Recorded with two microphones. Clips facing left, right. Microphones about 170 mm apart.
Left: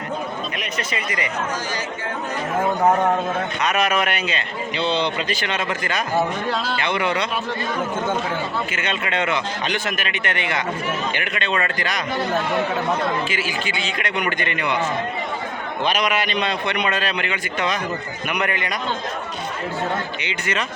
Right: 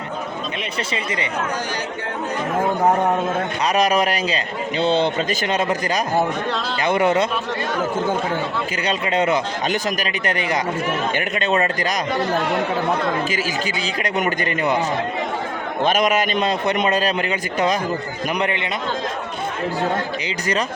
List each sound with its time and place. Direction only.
0.9 s speech: 30° right (ahead or behind)
3.6 s a man's voice: 35° right (ahead or behind)
8.7 s a man's voice: 35° right (ahead or behind)
13.3 s a man's voice: 40° right (ahead or behind)
15.8 s a man's voice: 50° right (ahead or behind)
18.3 s speech: 25° right (ahead or behind)
19.8 s a man's voice: 35° right (ahead or behind)